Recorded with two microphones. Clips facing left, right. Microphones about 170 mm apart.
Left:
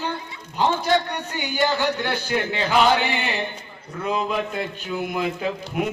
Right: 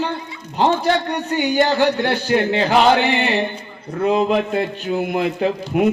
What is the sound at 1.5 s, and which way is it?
Speech, 50° right (ahead or behind).